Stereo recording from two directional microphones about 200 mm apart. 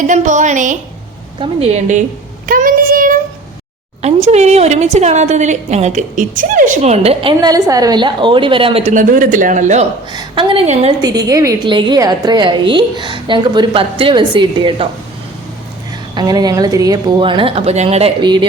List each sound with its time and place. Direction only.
0.1 s a woman's voice: 40° right (ahead or behind)
10.1 s a woman's voice: 20° right (ahead or behind)
11.0 s a woman's voice: 20° right (ahead or behind)
16.1 s a woman's voice: 20° right (ahead or behind)